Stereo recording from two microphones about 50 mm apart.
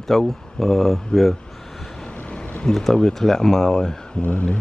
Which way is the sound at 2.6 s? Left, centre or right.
Centre.